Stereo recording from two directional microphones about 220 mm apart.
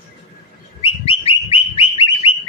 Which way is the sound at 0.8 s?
25° left (ahead or behind).